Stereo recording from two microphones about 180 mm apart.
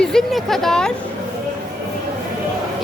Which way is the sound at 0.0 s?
Centre (ahead or behind).